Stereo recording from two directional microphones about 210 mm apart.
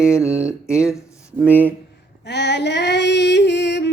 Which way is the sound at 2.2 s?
55° left (ahead or behind).